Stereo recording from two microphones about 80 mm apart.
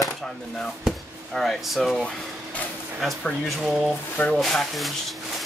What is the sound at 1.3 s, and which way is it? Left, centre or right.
Speech, centre.